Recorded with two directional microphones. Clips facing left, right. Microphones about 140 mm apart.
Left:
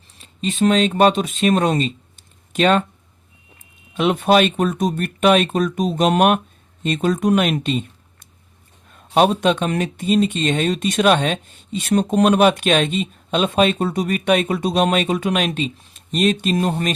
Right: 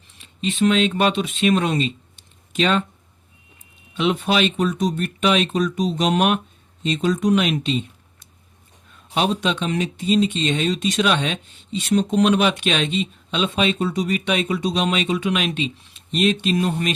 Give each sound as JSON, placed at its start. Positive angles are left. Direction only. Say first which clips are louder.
{"t": 0.2, "sound": "speech", "louder": "left 1 dB", "side_deg": 40}
{"t": 3.9, "sound": "speech", "louder": "left 5 dB", "side_deg": 50}